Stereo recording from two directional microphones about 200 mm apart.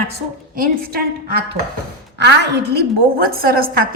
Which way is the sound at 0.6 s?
50° right (ahead or behind).